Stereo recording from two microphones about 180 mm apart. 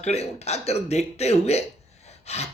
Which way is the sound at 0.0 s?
35° left (ahead or behind).